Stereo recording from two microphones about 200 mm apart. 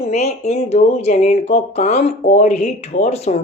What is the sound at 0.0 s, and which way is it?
Speech, 35° left (ahead or behind).